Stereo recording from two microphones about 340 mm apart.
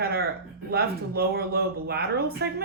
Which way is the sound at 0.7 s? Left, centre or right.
Right.